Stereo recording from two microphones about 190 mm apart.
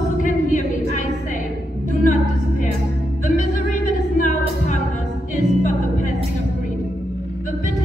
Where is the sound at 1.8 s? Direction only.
40° left (ahead or behind).